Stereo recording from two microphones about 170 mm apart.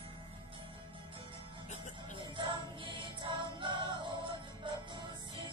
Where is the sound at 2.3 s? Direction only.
30° right (ahead or behind).